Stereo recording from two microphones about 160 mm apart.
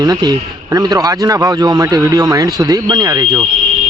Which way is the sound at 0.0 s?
25° right (ahead or behind).